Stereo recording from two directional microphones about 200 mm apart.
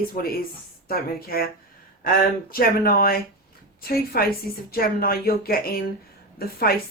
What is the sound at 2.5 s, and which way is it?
A woman's voice, 50° left (ahead or behind).